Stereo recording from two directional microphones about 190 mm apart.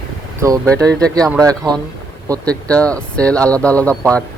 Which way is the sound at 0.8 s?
20° right (ahead or behind).